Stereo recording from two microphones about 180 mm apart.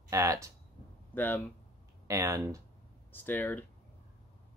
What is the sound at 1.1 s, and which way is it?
Speech, 10° left (ahead or behind).